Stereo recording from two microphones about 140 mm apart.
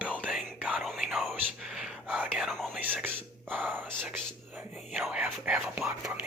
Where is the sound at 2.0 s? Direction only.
10° right (ahead or behind).